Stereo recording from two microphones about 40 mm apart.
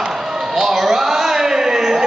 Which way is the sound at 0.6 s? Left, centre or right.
Centre.